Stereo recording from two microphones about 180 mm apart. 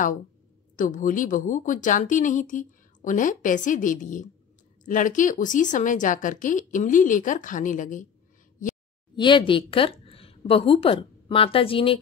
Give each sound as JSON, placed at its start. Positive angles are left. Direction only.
{"t": 0.7, "sound": "speech", "side_deg": 45}
{"t": 9.1, "sound": "a woman's voice", "side_deg": 25}